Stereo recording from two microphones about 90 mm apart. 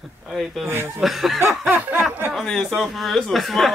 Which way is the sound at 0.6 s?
30° right (ahead or behind).